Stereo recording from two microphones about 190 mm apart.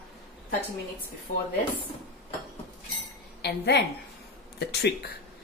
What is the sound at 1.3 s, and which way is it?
Speech, 35° left (ahead or behind).